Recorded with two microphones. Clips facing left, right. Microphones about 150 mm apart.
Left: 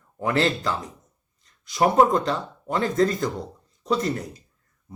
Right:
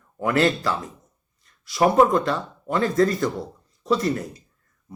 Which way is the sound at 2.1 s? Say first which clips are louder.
Right 1 dB; 25° left (ahead or behind).